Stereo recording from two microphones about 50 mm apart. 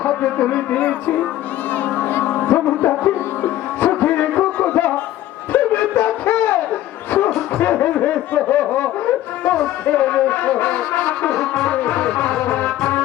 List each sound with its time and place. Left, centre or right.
0.0 s speech: left
2.4 s music: left
5.5 s a sound: left
7.6 s snicker: left
9.8 s music: left
11.3 s brass instrument: centre
11.6 s music: left